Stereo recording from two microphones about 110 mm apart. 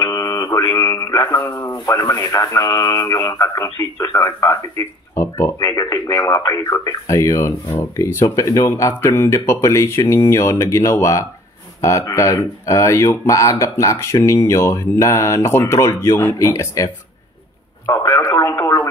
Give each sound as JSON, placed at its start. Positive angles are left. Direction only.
{"t": 0.0, "sound": "mantra", "side_deg": 35}
{"t": 1.4, "sound": "speech", "side_deg": 25}
{"t": 17.8, "sound": "radio", "side_deg": 30}